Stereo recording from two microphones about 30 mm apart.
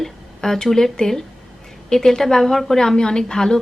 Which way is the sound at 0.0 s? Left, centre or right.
Centre.